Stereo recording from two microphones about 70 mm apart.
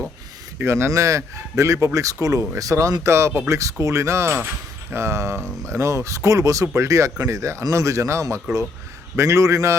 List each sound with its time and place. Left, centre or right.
0.6 s speech: right